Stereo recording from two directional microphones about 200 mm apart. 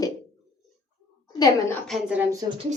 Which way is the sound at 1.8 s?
Centre (ahead or behind).